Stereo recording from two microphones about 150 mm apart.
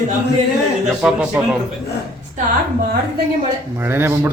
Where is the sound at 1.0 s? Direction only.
5° right (ahead or behind).